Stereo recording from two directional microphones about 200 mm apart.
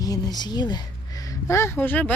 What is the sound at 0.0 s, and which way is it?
Speech, 20° left (ahead or behind).